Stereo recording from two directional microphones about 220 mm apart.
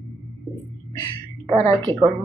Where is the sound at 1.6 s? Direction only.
10° left (ahead or behind).